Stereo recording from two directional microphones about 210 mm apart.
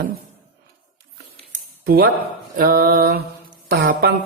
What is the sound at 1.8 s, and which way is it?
Speech, 45° right (ahead or behind).